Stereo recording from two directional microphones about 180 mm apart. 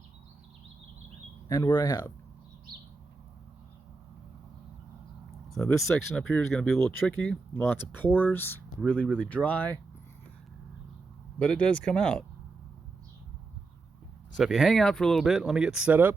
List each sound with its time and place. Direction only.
1.5 s speech: 20° left (ahead or behind)
5.5 s speech: centre (ahead or behind)
9.0 s speech: 5° right (ahead or behind)
9.3 s speech: 10° left (ahead or behind)
11.3 s speech: 5° left (ahead or behind)
14.3 s speech: centre (ahead or behind)